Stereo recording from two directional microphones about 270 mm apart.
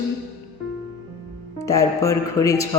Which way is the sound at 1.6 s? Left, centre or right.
Centre.